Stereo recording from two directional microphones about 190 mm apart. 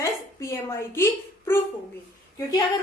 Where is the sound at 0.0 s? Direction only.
15° left (ahead or behind).